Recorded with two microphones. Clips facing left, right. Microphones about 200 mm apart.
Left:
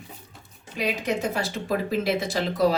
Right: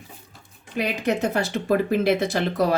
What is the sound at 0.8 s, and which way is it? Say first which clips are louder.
Speech: right 3 dB; 60° right (ahead or behind).